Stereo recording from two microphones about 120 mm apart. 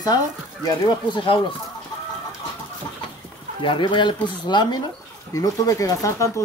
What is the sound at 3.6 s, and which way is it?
Speech, 45° left (ahead or behind).